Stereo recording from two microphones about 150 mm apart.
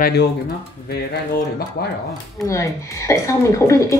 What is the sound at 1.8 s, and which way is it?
Speech, 90° left.